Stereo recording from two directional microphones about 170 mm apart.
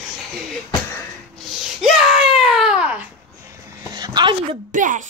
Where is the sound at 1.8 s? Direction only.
Centre (ahead or behind).